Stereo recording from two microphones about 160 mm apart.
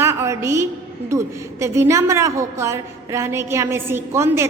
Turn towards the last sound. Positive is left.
turn(degrees=-15)  # may be behind; listen again after turning